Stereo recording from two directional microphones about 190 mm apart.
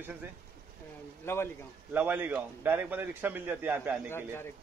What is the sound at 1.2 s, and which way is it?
Speech, 10° left (ahead or behind).